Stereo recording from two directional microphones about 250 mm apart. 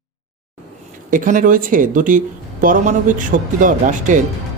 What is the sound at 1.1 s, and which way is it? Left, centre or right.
Speech, right.